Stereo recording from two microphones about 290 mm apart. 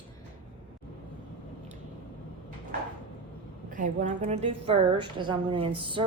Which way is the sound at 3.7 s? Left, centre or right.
Right.